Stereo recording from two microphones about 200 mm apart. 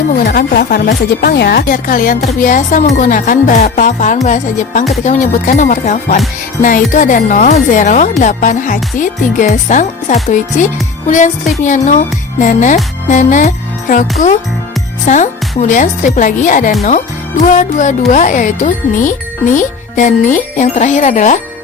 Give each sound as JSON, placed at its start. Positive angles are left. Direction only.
{"t": 0.3, "sound": "speech", "side_deg": 45}
{"t": 11.6, "sound": "music", "side_deg": 40}
{"t": 15.0, "sound": "speech", "side_deg": 40}